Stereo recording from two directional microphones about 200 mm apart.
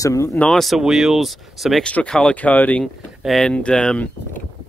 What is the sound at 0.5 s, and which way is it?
Speech, centre (ahead or behind).